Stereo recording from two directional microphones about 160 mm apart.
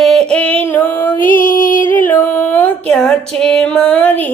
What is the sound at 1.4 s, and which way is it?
Music, 60° left (ahead or behind).